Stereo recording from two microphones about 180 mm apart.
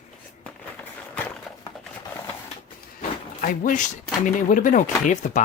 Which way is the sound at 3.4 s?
45° left (ahead or behind).